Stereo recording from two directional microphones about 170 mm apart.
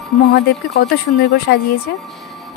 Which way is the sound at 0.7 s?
65° left (ahead or behind).